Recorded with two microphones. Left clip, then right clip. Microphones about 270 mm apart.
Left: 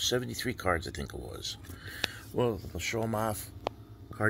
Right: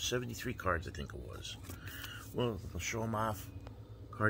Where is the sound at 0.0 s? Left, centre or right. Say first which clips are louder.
Left 7 dB; centre.